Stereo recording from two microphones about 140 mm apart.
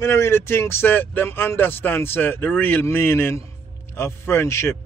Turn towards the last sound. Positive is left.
turn(degrees=20)  # may be behind; listen again after turning